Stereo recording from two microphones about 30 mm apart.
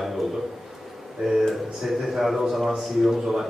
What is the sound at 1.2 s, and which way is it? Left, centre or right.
Speech, centre.